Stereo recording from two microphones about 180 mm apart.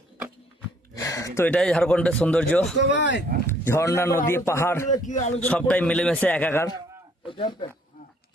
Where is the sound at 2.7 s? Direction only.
75° left (ahead or behind).